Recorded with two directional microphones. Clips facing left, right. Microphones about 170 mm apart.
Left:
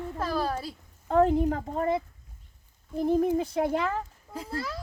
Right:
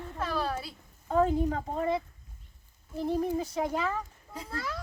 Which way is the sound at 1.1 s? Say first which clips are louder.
Left 4 dB; 65° left (ahead or behind).